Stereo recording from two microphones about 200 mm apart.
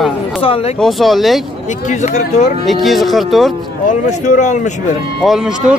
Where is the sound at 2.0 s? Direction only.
35° left (ahead or behind).